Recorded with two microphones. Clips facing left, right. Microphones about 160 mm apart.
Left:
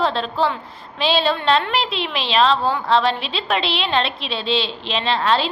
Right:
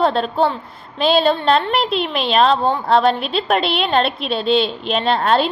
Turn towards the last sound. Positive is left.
turn(degrees=-50)  # may be behind; listen again after turning